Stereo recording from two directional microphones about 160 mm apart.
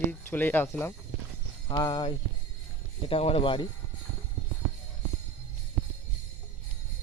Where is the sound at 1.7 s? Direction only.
30° left (ahead or behind).